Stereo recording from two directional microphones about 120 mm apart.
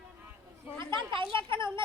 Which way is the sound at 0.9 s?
45° right (ahead or behind).